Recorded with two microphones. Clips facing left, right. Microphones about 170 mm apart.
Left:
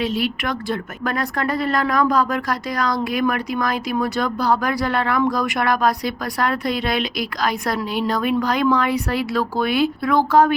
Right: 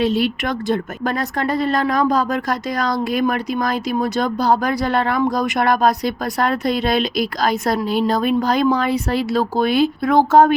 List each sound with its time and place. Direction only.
0.2 s speech: 25° right (ahead or behind)
10.0 s speech: 25° right (ahead or behind)